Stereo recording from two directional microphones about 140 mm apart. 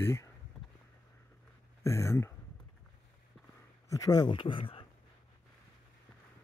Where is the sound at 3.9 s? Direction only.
25° left (ahead or behind).